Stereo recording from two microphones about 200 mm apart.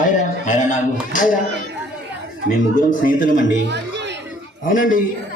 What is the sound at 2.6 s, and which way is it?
Speech, 40° left (ahead or behind).